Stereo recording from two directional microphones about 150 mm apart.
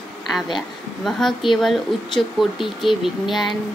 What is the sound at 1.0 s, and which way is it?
Speech, centre (ahead or behind).